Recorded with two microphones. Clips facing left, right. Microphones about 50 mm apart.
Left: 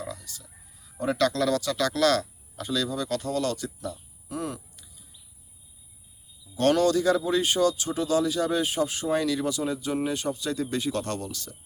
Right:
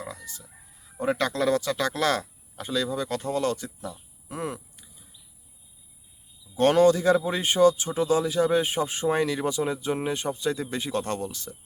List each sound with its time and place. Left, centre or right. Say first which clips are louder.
0.0 s goose: left 1 dB; right
0.9 s speech: left 1 dB; right
6.6 s speech: right 3 dB; right